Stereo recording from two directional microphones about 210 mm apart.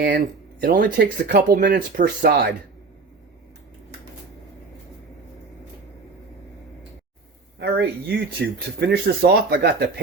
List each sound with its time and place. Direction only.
0.6 s speech: 40° right (ahead or behind)
7.6 s speech: 50° right (ahead or behind)